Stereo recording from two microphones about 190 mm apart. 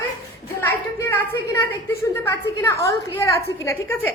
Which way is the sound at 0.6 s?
10° left (ahead or behind).